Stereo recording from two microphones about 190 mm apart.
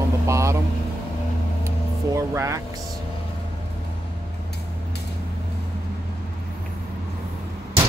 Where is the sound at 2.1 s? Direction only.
15° right (ahead or behind).